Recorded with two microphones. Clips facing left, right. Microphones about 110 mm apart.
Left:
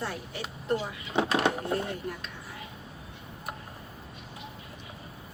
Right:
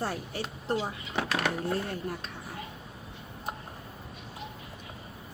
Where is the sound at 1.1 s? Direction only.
20° left (ahead or behind).